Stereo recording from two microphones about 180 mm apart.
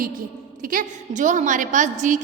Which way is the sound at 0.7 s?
45° right (ahead or behind).